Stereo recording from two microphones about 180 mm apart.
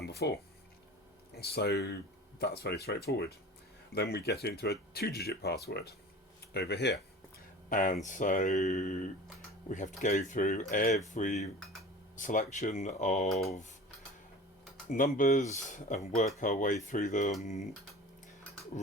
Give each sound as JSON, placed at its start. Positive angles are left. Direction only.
{"t": 0.0, "sound": "a sound", "side_deg": 65}
{"t": 1.3, "sound": "speech", "side_deg": 60}
{"t": 7.7, "sound": "speech", "side_deg": 50}
{"t": 14.8, "sound": "speech", "side_deg": 50}